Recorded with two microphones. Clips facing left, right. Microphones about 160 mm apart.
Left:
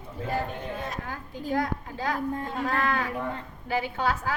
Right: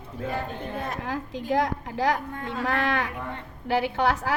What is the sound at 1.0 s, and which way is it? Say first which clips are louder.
A woman's voice: right 5 dB; 90° right.